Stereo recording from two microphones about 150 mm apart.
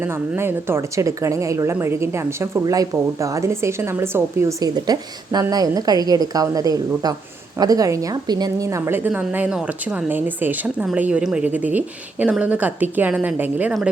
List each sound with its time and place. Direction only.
0.0 s a woman's voice: 15° right (ahead or behind)